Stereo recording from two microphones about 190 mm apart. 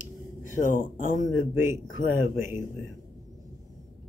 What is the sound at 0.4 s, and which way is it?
Speech, 45° left (ahead or behind).